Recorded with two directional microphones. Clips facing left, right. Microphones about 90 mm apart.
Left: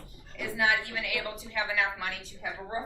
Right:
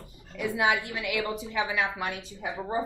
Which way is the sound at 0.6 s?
15° right (ahead or behind).